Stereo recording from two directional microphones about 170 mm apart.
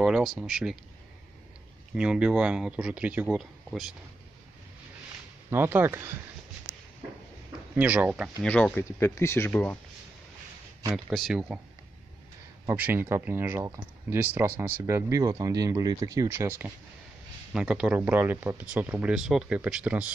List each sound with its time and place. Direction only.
0.0 s speech: centre (ahead or behind)
2.0 s speech: 5° right (ahead or behind)
5.5 s speech: 10° right (ahead or behind)
7.7 s speech: 10° right (ahead or behind)
8.5 s speech: 5° left (ahead or behind)
11.1 s speech: centre (ahead or behind)
12.6 s speech: 10° right (ahead or behind)